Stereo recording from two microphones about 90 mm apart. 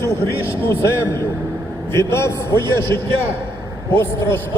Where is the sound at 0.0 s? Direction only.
30° left (ahead or behind).